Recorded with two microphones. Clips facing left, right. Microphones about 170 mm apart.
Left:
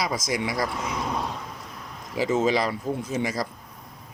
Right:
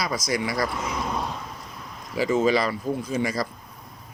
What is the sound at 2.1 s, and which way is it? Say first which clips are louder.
Speech: right 1 dB; 20° left (ahead or behind).